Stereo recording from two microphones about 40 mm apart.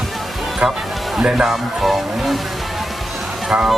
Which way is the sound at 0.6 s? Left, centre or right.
Centre.